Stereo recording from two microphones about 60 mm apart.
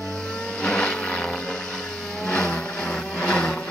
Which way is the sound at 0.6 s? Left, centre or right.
Centre.